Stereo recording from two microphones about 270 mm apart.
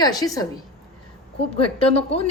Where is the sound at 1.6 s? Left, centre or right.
Left.